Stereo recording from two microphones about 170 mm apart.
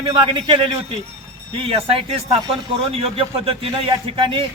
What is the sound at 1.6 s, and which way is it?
A man's voice, 35° right (ahead or behind).